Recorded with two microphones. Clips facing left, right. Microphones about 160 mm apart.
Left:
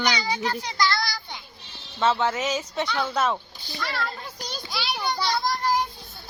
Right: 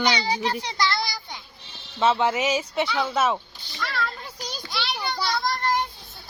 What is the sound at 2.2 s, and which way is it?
Speech, 10° right (ahead or behind).